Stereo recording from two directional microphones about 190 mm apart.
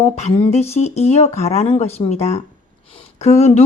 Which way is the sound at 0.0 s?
35° left (ahead or behind).